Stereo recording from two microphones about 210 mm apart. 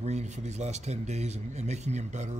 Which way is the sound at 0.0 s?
35° right (ahead or behind).